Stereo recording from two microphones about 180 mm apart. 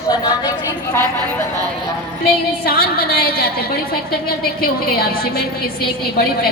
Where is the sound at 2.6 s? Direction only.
55° left (ahead or behind).